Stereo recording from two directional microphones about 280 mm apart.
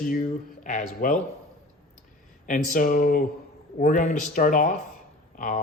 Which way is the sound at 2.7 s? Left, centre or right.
Left.